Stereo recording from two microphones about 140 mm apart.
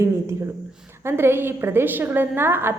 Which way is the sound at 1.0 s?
15° right (ahead or behind).